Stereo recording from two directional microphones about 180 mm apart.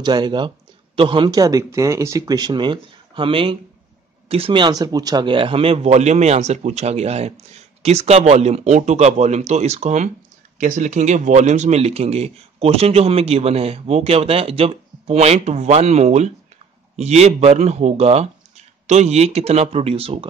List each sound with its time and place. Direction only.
0.0 s speech: 25° right (ahead or behind)